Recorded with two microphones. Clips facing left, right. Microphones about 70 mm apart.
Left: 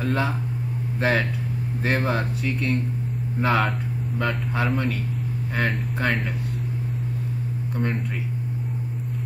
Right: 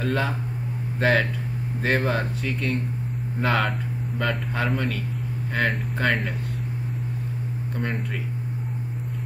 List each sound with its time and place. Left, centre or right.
0.0 s speech: centre
7.8 s speech: centre